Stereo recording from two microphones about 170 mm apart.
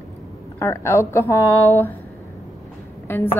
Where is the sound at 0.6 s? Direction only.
15° left (ahead or behind).